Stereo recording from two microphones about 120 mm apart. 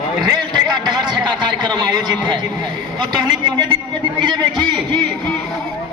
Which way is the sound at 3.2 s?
40° right (ahead or behind).